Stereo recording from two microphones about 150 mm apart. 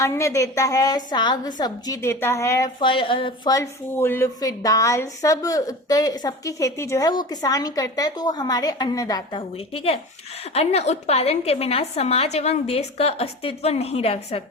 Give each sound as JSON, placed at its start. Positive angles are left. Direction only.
{"t": 0.0, "sound": "speech", "side_deg": 20}
{"t": 2.8, "sound": "a woman's voice", "side_deg": 35}
{"t": 3.9, "sound": "speech", "side_deg": 15}
{"t": 9.7, "sound": "a woman's voice", "side_deg": 40}